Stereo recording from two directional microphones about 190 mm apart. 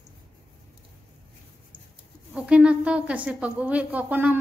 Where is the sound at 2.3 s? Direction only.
5° right (ahead or behind).